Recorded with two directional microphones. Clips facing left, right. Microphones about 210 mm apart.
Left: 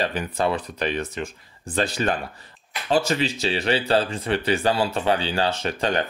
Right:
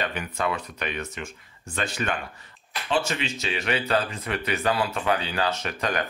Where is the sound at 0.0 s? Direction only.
35° left (ahead or behind).